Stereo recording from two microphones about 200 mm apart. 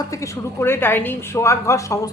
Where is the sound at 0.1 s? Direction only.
15° left (ahead or behind).